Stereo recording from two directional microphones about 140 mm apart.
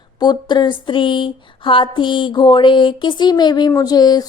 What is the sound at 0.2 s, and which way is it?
Speech, 30° left (ahead or behind).